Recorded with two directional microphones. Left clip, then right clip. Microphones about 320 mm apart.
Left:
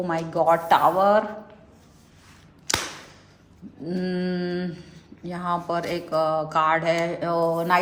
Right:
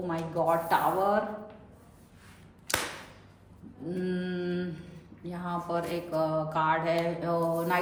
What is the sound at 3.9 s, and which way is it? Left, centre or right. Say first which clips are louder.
Mantra: left 6 dB; left.